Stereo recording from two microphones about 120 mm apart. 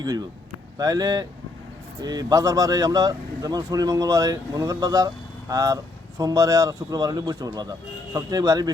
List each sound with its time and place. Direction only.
0.0 s speech: 35° right (ahead or behind)